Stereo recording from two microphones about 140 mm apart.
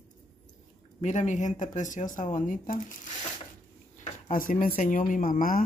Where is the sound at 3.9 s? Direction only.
65° left (ahead or behind).